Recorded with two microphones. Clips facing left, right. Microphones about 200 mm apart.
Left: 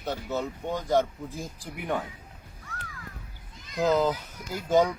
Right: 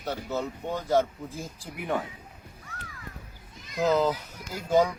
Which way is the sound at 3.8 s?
15° left (ahead or behind).